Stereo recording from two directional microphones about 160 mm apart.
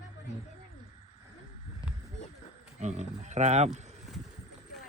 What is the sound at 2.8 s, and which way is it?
Speech, 45° right (ahead or behind).